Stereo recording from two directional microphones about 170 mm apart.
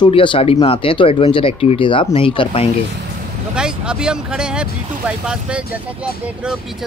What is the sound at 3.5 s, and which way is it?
Speech, 5° right (ahead or behind).